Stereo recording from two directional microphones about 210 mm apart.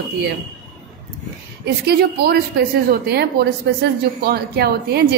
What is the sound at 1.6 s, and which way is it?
A woman's voice, 50° right (ahead or behind).